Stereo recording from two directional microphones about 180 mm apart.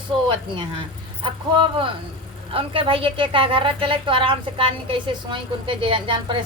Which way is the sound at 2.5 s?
30° right (ahead or behind).